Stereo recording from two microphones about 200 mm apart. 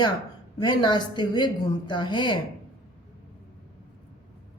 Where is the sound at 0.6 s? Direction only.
20° left (ahead or behind).